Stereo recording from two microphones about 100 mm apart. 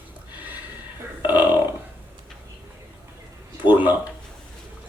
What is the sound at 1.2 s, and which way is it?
Burping, 20° right (ahead or behind).